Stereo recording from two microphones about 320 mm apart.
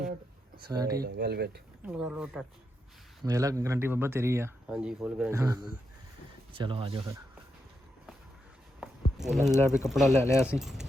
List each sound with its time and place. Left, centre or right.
0.5 s speech: centre
1.0 s speech: right
1.8 s speech: centre
8.8 s a sound: centre
9.8 s speech: centre